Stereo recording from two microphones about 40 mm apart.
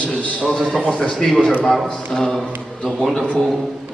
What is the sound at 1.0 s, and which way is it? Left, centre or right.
A man's voice, centre.